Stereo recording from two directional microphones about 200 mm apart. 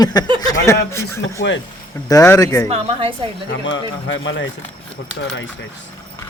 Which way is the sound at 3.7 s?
70° left (ahead or behind).